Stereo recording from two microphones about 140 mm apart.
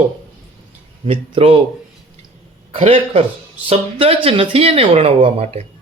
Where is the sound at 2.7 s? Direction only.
45° right (ahead or behind).